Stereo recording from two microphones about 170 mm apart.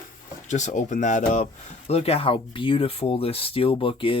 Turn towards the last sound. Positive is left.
turn(degrees=30)  # may be behind; listen again after turning